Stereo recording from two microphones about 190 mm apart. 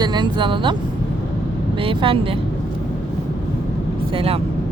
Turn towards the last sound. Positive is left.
turn(degrees=-30)  # may be behind; listen again after turning